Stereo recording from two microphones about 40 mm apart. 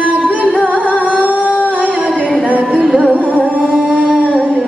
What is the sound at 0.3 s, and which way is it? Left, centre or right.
Music, right.